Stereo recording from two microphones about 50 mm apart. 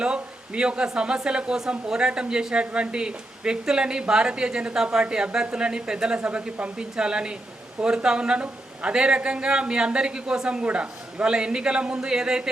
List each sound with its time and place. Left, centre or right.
0.0 s speech: centre